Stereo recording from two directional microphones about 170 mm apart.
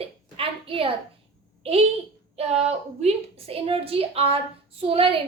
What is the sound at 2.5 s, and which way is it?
A woman's voice, 40° right (ahead or behind).